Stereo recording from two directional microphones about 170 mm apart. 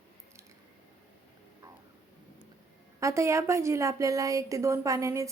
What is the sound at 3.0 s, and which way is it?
A woman's voice, 15° right (ahead or behind).